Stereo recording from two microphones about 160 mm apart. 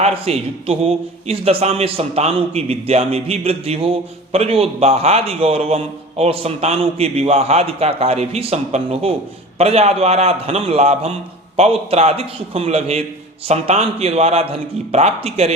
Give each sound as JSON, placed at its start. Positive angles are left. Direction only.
{"t": 0.0, "sound": "a man's voice", "side_deg": -40}